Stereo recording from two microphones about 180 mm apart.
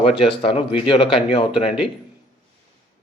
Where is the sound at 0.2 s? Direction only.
30° left (ahead or behind).